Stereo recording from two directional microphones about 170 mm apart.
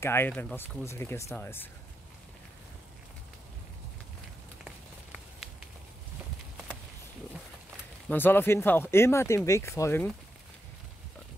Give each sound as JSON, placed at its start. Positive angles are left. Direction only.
{"t": 0.0, "sound": "speech", "side_deg": 15}
{"t": 8.1, "sound": "speech", "side_deg": 10}